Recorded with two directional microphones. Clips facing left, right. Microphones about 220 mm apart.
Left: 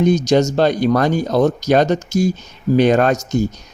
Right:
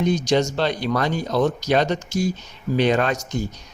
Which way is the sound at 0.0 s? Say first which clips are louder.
Left 6 dB; 45° left (ahead or behind).